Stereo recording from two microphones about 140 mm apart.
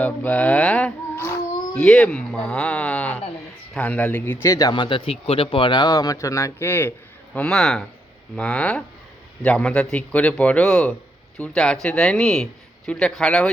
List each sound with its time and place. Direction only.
0.0 s a sound: 10° left (ahead or behind)
1.9 s a man's voice: 5° left (ahead or behind); by 4.7 s 20° left (ahead or behind)
4.7 s a man's voice: 35° left (ahead or behind); by 13.5 s 5° left (ahead or behind)